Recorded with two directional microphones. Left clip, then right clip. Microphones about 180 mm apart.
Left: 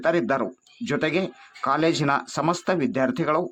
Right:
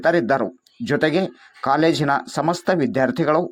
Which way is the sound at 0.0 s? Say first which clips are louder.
Right 4 dB; 15° right (ahead or behind).